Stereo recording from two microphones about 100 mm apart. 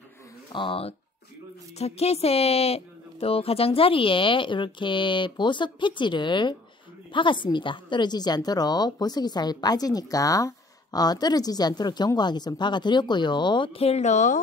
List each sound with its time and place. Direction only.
0.5 s speech: 55° left (ahead or behind)
1.8 s a woman's voice: 90° left; by 13.7 s 50° left (ahead or behind)
13.7 s speech: 90° left